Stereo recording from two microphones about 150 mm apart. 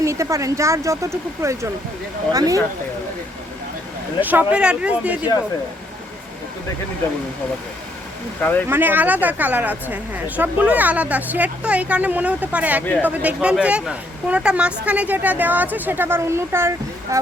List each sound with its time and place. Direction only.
0.0 s speech: 20° right (ahead or behind)
4.2 s speech: 10° right (ahead or behind)
8.4 s speech: 10° left (ahead or behind)
8.7 s speech: 15° right (ahead or behind)